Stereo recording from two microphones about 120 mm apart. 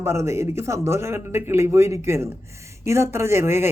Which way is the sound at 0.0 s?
20° right (ahead or behind).